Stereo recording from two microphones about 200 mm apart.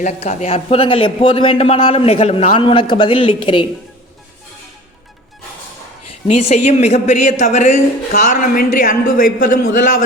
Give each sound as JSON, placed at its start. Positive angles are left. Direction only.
{"t": 0.0, "sound": "a man's voice", "side_deg": 35}
{"t": 6.2, "sound": "a woman's voice", "side_deg": 35}